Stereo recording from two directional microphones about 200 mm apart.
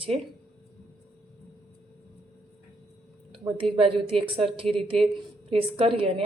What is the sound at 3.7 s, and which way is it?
A woman's voice, 30° right (ahead or behind).